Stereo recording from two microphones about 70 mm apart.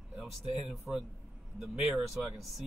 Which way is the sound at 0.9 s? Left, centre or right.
Centre.